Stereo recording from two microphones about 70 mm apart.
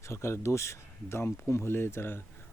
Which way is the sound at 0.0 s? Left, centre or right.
Left.